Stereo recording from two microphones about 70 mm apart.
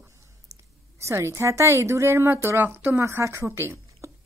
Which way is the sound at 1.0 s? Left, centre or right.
Right.